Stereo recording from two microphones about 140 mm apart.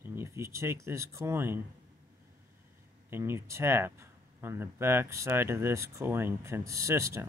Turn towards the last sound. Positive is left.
turn(degrees=-20)  # may be behind; listen again after turning